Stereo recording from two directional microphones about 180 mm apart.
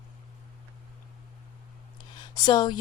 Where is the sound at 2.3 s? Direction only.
25° left (ahead or behind).